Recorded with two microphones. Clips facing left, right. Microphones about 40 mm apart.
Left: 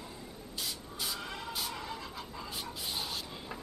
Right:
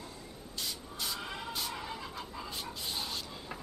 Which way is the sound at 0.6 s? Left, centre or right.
Centre.